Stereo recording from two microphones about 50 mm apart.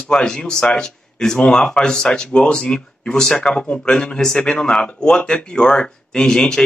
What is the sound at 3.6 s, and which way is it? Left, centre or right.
Speech, left.